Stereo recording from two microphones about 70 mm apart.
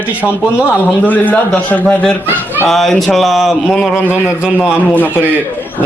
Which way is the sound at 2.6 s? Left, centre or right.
Centre.